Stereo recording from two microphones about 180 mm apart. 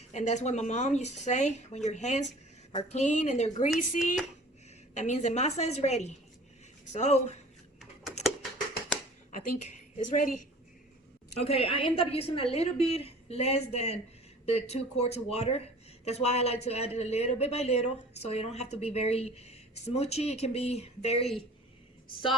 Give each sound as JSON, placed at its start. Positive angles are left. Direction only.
{"t": 0.1, "sound": "speech", "side_deg": 40}
{"t": 3.9, "sound": "a sound", "side_deg": 45}
{"t": 4.9, "sound": "speech", "side_deg": 40}
{"t": 9.3, "sound": "a woman's voice", "side_deg": 40}
{"t": 11.3, "sound": "speech", "side_deg": 35}